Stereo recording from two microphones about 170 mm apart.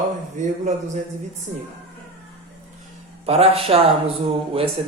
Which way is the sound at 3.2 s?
35° right (ahead or behind).